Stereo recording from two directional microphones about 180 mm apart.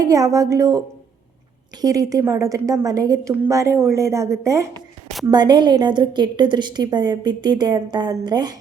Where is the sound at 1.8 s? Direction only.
20° right (ahead or behind).